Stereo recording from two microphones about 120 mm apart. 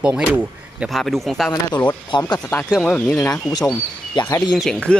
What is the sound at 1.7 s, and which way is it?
Speech, 40° left (ahead or behind).